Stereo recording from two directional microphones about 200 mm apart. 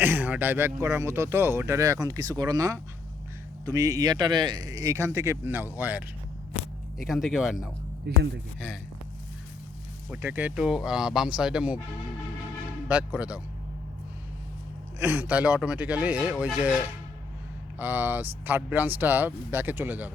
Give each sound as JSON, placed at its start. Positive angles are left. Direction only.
{"t": 0.0, "sound": "a man's voice", "side_deg": -10}
{"t": 7.0, "sound": "speech", "side_deg": 0}
{"t": 8.1, "sound": "a man's voice", "side_deg": -55}
{"t": 10.1, "sound": "speech", "side_deg": -10}
{"t": 12.9, "sound": "speech", "side_deg": -5}
{"t": 14.9, "sound": "speech", "side_deg": -10}
{"t": 17.7, "sound": "speech", "side_deg": -10}